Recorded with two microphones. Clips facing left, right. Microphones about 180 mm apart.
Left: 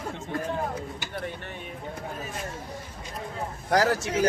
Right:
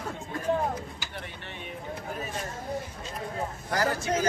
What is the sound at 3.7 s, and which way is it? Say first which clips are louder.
Speech: left 4 dB; 80° left.